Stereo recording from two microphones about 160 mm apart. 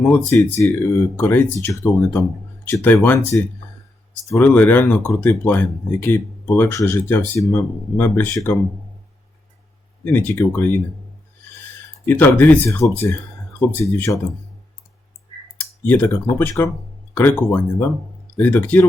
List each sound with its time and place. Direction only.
0.0 s speech: 10° left (ahead or behind)
10.0 s speech: 10° left (ahead or behind)
12.0 s speech: 10° left (ahead or behind)
15.5 s typing: 10° left (ahead or behind)
16.6 s speech: 15° left (ahead or behind)